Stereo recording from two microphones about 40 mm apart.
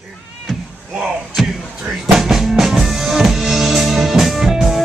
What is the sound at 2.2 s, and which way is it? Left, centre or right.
Drum, centre.